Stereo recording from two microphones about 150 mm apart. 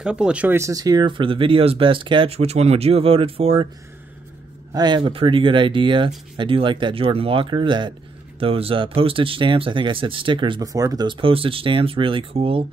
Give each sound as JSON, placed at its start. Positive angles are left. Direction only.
{"t": 0.0, "sound": "speech", "side_deg": -5}
{"t": 4.7, "sound": "speech", "side_deg": -30}